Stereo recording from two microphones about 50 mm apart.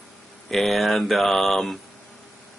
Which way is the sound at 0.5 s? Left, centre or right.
Centre.